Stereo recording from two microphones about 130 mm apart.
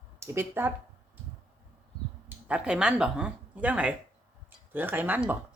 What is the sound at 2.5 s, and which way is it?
Speech, 5° right (ahead or behind).